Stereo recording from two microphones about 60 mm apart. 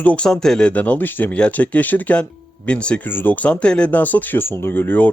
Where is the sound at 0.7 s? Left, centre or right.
Left.